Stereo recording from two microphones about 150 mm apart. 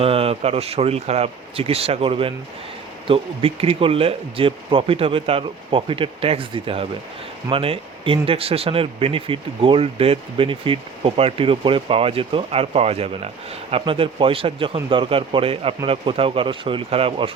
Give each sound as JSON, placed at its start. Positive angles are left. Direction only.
{"t": 0.0, "sound": "speech", "side_deg": -40}